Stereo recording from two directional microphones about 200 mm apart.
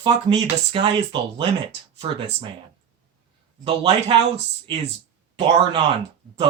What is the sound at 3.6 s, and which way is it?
Speech, 30° right (ahead or behind).